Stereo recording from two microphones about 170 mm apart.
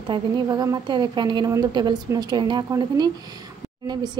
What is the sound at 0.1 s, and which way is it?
Speech, 20° right (ahead or behind).